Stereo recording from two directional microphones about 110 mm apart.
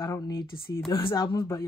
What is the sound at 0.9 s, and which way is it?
Speech, 30° left (ahead or behind).